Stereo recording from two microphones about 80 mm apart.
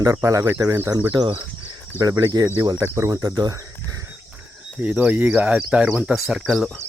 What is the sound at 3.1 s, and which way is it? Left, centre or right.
Speech, right.